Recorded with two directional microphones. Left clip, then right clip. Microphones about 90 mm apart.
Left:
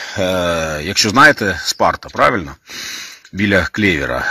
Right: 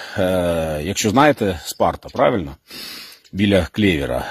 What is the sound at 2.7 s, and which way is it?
Speech, 40° right (ahead or behind).